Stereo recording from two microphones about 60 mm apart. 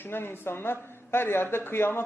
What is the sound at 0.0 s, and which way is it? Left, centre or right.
Speech, left.